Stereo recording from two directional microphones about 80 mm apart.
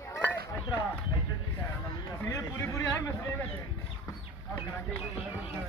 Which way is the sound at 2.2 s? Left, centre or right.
Left.